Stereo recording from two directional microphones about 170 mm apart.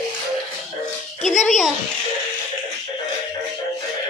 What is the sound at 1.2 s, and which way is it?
Music, 45° left (ahead or behind).